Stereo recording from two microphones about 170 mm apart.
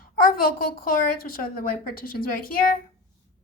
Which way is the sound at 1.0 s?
60° left (ahead or behind).